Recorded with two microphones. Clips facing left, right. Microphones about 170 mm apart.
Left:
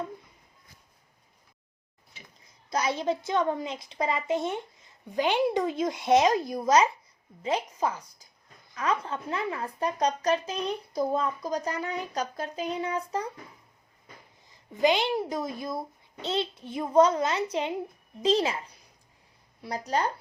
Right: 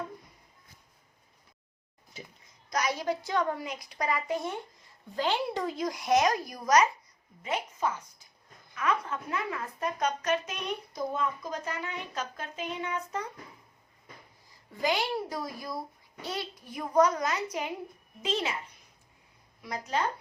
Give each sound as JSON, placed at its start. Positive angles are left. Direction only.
{"t": 2.6, "sound": "a woman's voice", "side_deg": 30}
{"t": 14.5, "sound": "a woman's voice", "side_deg": 20}